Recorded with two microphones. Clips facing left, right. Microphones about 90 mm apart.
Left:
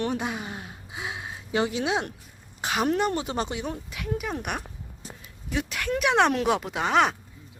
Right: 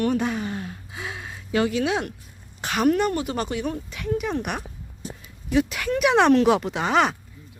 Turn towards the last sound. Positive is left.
turn(degrees=0)  # may be behind; listen again after turning